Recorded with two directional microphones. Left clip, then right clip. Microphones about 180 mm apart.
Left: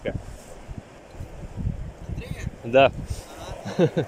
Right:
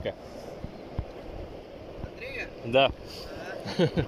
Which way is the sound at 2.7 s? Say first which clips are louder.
Left 6 dB; 20° left (ahead or behind).